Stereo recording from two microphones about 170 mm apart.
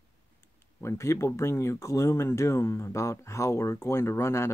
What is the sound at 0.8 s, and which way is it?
Speech, 15° left (ahead or behind).